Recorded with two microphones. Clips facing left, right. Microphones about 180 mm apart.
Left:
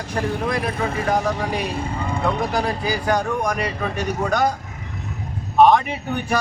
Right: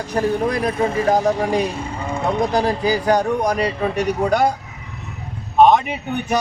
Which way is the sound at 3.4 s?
30° right (ahead or behind).